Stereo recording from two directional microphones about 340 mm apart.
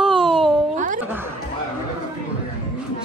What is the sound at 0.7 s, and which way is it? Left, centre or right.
Speech, right.